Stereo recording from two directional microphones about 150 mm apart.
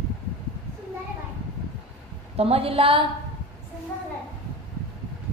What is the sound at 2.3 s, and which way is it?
Speech, 40° right (ahead or behind).